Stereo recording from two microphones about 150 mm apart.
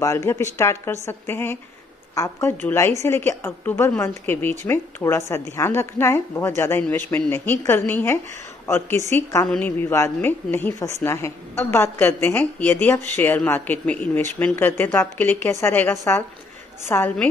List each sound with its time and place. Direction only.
0.0 s a woman's voice: 20° left (ahead or behind)